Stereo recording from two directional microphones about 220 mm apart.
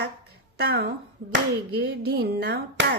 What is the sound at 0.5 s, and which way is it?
Speech, 50° right (ahead or behind).